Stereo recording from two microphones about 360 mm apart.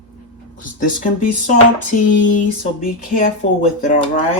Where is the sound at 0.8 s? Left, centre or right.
Left.